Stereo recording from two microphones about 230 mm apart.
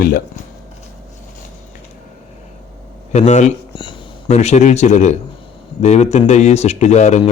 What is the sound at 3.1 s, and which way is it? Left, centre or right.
Speech, left.